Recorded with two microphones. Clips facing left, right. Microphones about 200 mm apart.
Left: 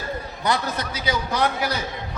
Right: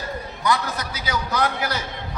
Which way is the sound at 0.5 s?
30° left (ahead or behind).